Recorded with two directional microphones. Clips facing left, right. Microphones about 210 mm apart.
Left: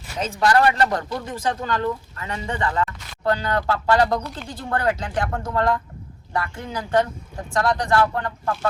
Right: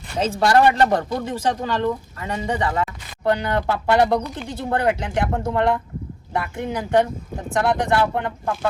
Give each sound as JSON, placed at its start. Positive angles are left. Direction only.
{"t": 0.2, "sound": "speech", "side_deg": -25}
{"t": 2.3, "sound": "speech", "side_deg": -15}